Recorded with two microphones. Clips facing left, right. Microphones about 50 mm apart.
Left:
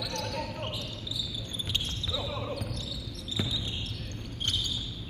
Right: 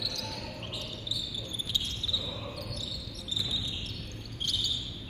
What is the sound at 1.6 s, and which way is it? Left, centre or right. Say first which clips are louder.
Basketball bounce: left 1 dB; left.